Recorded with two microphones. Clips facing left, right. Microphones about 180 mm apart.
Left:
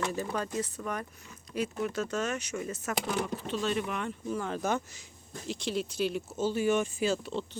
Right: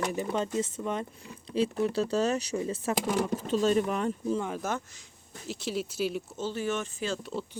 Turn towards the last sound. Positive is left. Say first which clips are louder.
# left 4 dB
turn(degrees=10)  # may be behind; listen again after turning